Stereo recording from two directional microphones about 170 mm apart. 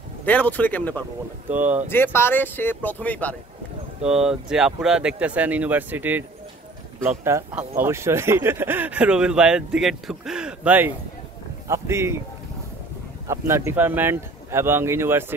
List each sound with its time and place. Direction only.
0.2 s speech: 10° left (ahead or behind)
1.5 s speech: 10° right (ahead or behind)
1.9 s speech: 15° left (ahead or behind)
4.0 s speech: 5° right (ahead or behind)
13.3 s speech: 15° right (ahead or behind)